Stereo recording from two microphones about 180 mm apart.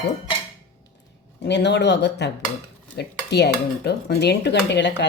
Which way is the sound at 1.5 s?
75° left (ahead or behind).